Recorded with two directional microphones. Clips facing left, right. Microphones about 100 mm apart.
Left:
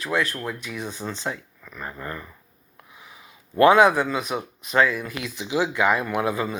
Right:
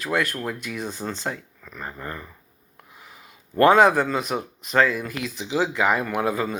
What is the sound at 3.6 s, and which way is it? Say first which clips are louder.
Speech: even; 35° right (ahead or behind).